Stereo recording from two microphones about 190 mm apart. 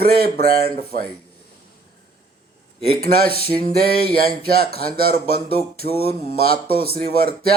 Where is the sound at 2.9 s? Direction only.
30° left (ahead or behind).